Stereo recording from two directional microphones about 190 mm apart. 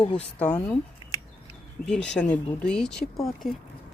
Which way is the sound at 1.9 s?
5° left (ahead or behind).